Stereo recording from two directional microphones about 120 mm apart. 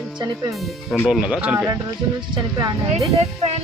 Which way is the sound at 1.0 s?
5° right (ahead or behind).